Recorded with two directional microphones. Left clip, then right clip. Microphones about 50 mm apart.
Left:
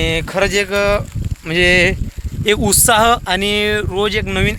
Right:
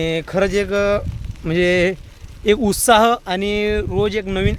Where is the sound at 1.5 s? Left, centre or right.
Right.